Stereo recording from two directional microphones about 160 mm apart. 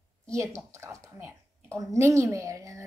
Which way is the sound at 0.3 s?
20° right (ahead or behind).